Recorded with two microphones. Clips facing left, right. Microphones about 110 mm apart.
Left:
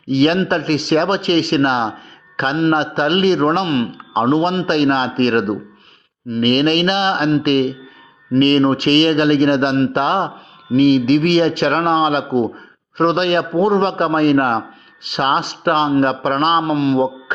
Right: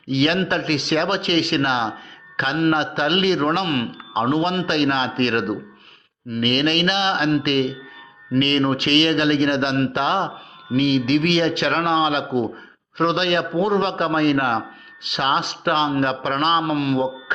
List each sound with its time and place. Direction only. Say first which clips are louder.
0.1 s speech: left 5 dB; 35° left (ahead or behind)